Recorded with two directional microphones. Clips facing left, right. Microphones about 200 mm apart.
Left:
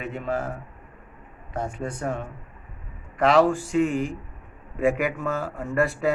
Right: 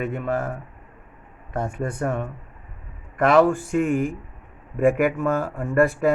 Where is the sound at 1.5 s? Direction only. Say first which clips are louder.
Right 3 dB; 55° right (ahead or behind).